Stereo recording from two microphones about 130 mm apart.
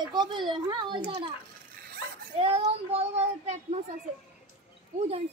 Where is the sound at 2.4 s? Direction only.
50° right (ahead or behind).